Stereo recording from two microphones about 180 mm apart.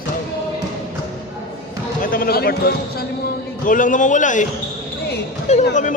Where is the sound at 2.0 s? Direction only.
50° left (ahead or behind).